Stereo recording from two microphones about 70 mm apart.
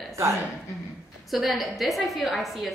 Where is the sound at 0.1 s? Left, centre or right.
Right.